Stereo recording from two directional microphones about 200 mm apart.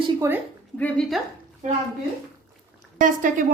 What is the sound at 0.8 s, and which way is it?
Speech, 5° left (ahead or behind).